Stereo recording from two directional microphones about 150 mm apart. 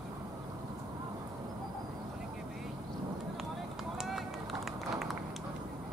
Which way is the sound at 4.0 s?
Centre (ahead or behind).